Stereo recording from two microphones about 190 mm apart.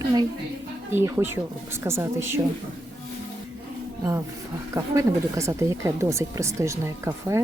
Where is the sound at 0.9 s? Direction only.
10° right (ahead or behind).